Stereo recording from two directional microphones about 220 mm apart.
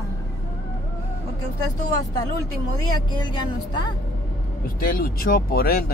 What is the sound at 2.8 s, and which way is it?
Speech, 20° left (ahead or behind).